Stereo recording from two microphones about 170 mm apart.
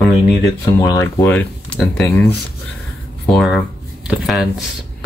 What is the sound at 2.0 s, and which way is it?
Speech, 15° left (ahead or behind).